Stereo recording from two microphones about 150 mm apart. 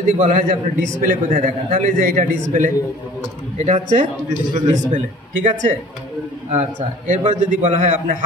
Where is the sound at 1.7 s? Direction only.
70° right (ahead or behind).